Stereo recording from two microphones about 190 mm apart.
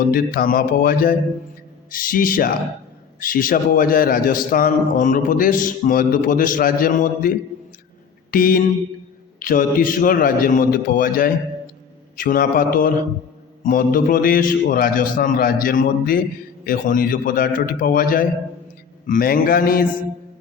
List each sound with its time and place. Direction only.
0.1 s a man's voice: 50° left (ahead or behind)
8.3 s mantra: 50° left (ahead or behind)
9.4 s a man's voice: 45° left (ahead or behind)